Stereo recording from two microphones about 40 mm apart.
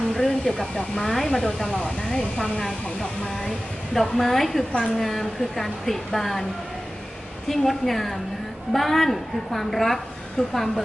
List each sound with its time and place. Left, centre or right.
0.1 s a sound: centre
0.8 s speech: centre
1.1 s speech: centre
1.7 s speech: left
2.4 s a woman's voice: centre
7.4 s a woman's voice: centre